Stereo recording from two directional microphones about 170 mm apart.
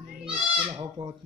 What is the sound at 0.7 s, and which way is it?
Speech, 25° right (ahead or behind).